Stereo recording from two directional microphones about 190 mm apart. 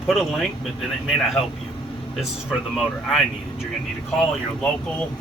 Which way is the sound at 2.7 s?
Centre (ahead or behind).